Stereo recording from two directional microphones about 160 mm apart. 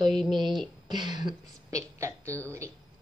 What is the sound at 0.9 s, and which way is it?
A woman's voice, 25° right (ahead or behind).